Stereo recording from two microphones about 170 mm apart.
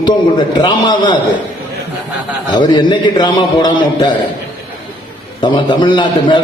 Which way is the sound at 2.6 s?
25° left (ahead or behind).